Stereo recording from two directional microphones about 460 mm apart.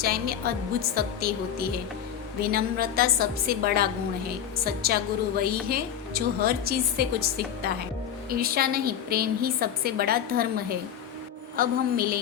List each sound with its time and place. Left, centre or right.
0.0 s a woman's voice: centre
11.5 s a woman's voice: centre